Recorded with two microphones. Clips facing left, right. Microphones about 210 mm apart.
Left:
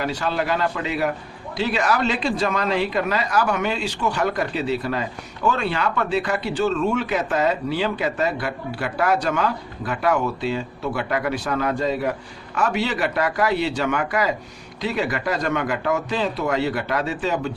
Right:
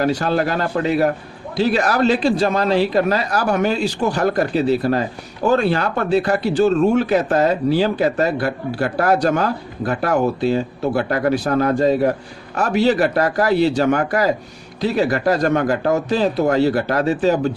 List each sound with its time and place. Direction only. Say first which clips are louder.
0.0 s speech: right 6 dB; 40° right (ahead or behind)